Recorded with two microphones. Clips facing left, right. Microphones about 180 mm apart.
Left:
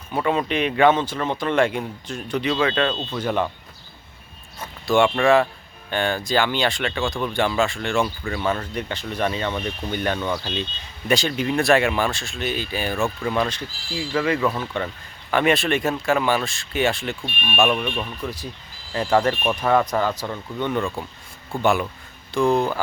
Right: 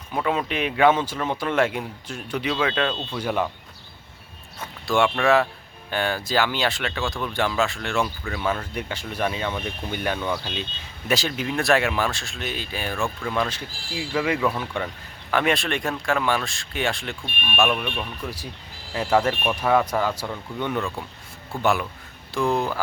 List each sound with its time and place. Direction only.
0.1 s a man's voice: centre (ahead or behind)
4.9 s a man's voice: centre (ahead or behind)
13.7 s speech: 55° right (ahead or behind)
14.1 s a man's voice: 10° right (ahead or behind)
15.3 s speech: centre (ahead or behind)
18.9 s a man's voice: 5° right (ahead or behind)